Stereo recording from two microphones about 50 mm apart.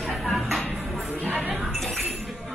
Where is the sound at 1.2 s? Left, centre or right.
Right.